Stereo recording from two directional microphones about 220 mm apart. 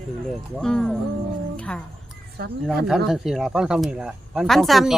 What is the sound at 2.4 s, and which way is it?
Speech, 45° right (ahead or behind).